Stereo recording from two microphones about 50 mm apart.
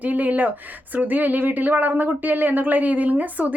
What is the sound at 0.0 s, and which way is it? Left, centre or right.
Speech, right.